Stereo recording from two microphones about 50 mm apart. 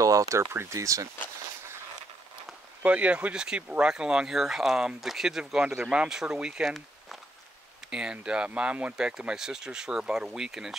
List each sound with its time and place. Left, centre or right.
0.3 s speech: right
2.8 s speech: right
7.9 s speech: centre
8.9 s speech: centre